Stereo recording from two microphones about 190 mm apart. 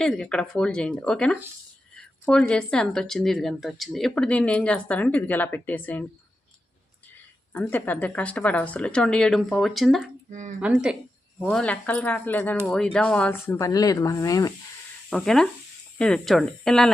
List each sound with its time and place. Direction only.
0.0 s speech: 5° left (ahead or behind)
7.5 s speech: 10° left (ahead or behind)
11.3 s speech: 5° left (ahead or behind)
15.1 s speech: 5° left (ahead or behind)